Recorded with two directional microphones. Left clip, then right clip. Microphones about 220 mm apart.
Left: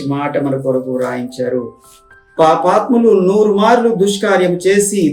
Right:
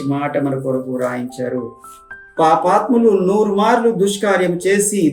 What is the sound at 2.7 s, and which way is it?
Speech, 10° left (ahead or behind).